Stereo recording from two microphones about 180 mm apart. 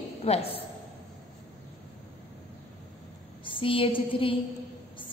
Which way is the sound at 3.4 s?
30° left (ahead or behind).